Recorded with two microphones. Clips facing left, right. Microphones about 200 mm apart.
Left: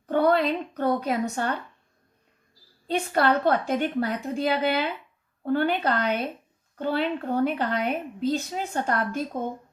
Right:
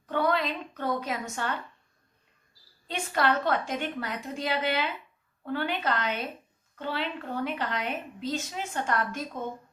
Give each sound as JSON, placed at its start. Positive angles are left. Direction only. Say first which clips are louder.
{"t": 0.1, "sound": "a woman's voice", "louder": "left 6 dB", "side_deg": 45}
{"t": 2.8, "sound": "a woman's voice", "louder": "left 5 dB", "side_deg": 40}